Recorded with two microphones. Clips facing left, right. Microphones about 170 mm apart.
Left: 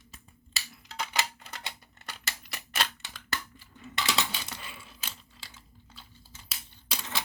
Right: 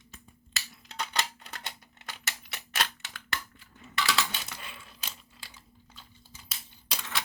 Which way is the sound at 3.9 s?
25° left (ahead or behind).